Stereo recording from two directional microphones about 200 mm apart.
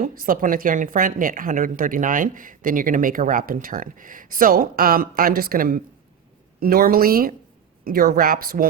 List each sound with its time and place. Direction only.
0.0 s speech: 45° right (ahead or behind)